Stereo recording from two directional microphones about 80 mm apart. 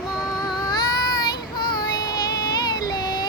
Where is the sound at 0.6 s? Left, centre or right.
Left.